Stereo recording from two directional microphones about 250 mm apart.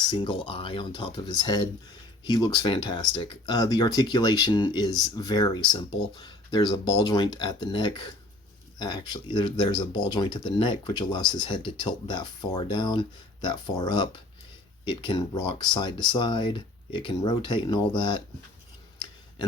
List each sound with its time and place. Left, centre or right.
0.1 s speech: centre